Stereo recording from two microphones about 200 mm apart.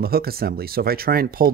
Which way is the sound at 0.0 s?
50° right (ahead or behind).